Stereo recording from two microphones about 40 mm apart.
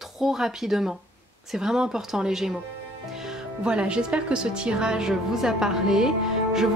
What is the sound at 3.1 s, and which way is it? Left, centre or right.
Music, centre.